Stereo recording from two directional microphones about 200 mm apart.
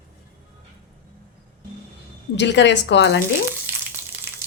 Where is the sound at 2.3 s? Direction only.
60° left (ahead or behind).